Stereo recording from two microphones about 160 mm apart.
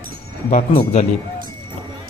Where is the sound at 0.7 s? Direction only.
45° left (ahead or behind).